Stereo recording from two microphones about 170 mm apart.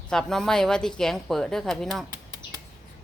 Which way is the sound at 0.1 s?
5° left (ahead or behind).